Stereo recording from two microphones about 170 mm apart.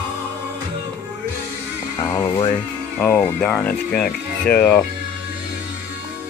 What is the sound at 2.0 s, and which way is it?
Speech, 20° left (ahead or behind).